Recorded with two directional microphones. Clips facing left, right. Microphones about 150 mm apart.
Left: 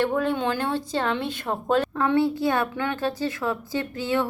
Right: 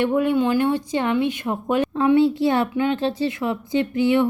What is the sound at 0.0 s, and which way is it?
A woman's voice, 15° right (ahead or behind).